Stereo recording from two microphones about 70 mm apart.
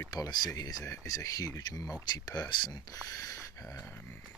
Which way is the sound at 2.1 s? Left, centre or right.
Left.